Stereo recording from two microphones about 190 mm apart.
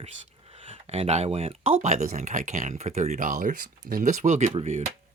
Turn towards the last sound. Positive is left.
turn(degrees=-35)  # may be behind; listen again after turning